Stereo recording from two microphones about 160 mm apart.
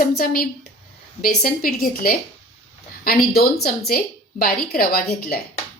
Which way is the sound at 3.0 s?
75° left (ahead or behind).